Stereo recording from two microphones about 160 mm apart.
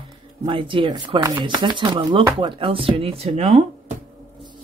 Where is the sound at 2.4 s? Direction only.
35° right (ahead or behind).